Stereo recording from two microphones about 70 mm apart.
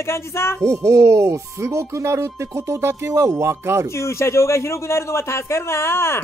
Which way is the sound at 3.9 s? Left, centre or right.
Left.